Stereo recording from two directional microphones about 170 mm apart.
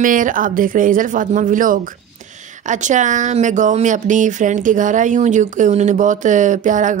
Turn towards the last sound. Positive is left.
turn(degrees=-50)  # may be behind; listen again after turning